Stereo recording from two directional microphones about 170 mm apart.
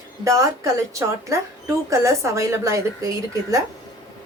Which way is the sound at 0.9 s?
20° right (ahead or behind).